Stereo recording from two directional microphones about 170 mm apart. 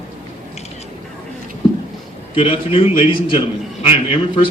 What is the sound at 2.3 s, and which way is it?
A man's voice, 30° left (ahead or behind).